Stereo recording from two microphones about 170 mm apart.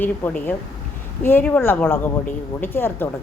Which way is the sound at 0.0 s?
10° left (ahead or behind).